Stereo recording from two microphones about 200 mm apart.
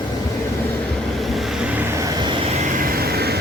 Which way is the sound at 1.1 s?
Centre (ahead or behind).